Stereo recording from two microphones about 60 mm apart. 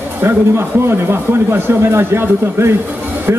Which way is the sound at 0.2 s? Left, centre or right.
Right.